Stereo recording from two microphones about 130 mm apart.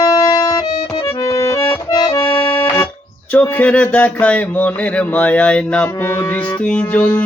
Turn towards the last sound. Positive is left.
turn(degrees=10)  # may be behind; listen again after turning